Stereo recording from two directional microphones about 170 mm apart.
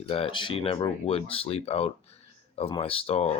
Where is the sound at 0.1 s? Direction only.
30° left (ahead or behind).